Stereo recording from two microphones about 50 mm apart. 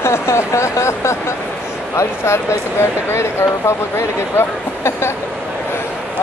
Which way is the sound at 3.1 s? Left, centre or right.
Left.